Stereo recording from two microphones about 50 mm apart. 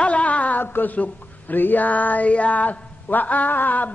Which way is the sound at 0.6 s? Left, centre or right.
Left.